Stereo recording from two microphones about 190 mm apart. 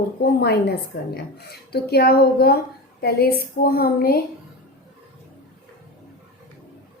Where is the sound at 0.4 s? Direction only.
60° left (ahead or behind).